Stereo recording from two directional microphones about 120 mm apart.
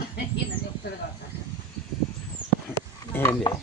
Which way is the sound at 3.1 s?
20° left (ahead or behind).